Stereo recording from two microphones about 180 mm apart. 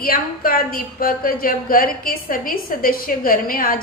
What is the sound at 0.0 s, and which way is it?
A woman's voice, 55° left (ahead or behind).